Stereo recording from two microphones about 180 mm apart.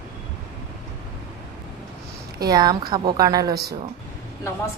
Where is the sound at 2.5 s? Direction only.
25° right (ahead or behind).